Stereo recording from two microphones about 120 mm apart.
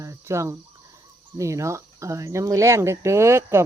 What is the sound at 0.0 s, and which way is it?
Cricket, 25° right (ahead or behind).